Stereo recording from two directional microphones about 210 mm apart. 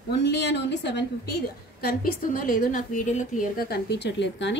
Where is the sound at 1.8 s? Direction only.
45° left (ahead or behind).